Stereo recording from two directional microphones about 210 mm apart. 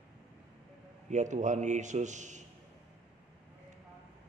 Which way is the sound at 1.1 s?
35° right (ahead or behind).